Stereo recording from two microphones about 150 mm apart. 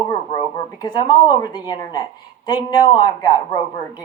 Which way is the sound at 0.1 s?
25° left (ahead or behind).